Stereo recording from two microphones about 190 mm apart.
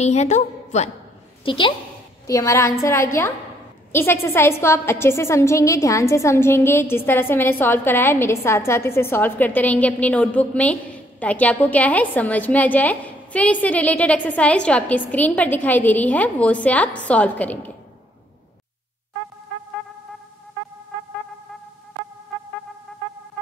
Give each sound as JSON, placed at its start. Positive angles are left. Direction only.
{"t": 0.0, "sound": "a woman's voice", "side_deg": 35}
{"t": 1.4, "sound": "a woman's voice", "side_deg": 25}
{"t": 2.2, "sound": "a woman's voice", "side_deg": 15}